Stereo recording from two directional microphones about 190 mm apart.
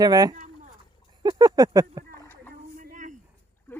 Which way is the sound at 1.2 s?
20° right (ahead or behind).